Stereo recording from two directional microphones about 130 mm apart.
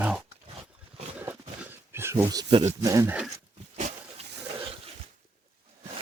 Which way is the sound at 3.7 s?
65° right (ahead or behind).